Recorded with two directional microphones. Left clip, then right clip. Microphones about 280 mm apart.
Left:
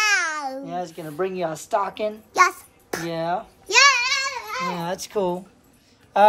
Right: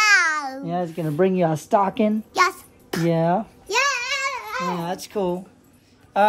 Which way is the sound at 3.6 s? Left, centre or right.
Left.